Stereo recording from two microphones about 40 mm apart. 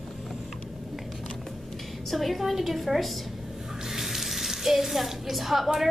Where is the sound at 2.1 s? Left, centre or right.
Centre.